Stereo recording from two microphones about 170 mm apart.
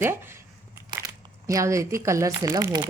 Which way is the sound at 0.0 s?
15° right (ahead or behind).